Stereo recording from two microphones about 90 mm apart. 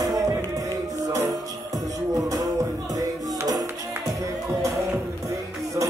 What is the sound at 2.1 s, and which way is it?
Music, 40° right (ahead or behind).